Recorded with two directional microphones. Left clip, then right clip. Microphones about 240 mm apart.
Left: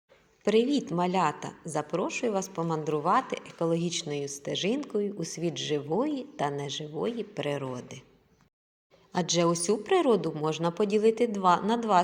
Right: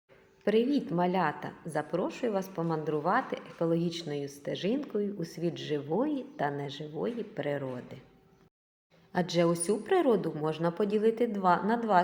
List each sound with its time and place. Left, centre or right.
0.4 s a woman's voice: left
9.1 s a woman's voice: left